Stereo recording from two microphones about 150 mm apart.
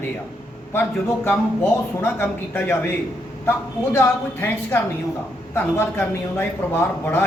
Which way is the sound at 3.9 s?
15° left (ahead or behind).